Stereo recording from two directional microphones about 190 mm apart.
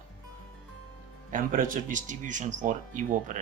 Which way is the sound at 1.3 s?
45° right (ahead or behind).